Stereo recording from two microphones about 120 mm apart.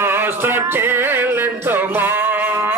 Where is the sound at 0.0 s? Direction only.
20° right (ahead or behind).